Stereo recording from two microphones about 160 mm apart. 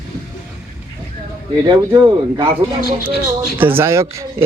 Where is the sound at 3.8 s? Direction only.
15° right (ahead or behind).